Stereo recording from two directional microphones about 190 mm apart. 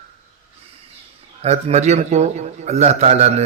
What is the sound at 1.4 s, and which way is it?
A man's voice, 35° right (ahead or behind).